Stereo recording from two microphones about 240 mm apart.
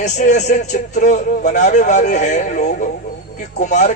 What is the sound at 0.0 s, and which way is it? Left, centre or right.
A man's voice, left.